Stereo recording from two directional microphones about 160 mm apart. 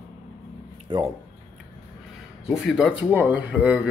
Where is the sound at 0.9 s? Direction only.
30° right (ahead or behind).